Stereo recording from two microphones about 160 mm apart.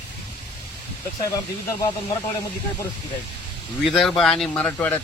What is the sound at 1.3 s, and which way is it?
Speech, 20° left (ahead or behind).